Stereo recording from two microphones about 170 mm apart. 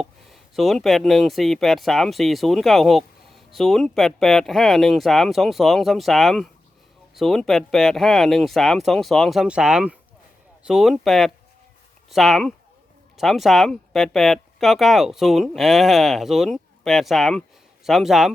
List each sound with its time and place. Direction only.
0.0 s speech: centre (ahead or behind)